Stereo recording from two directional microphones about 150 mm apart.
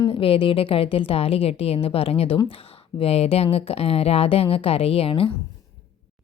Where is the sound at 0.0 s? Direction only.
35° left (ahead or behind).